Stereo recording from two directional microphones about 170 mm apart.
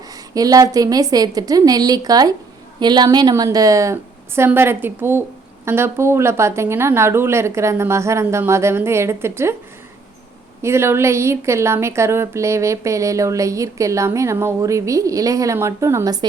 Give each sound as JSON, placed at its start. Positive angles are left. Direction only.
{"t": 0.3, "sound": "a woman's voice", "side_deg": -20}
{"t": 10.6, "sound": "a woman's voice", "side_deg": -15}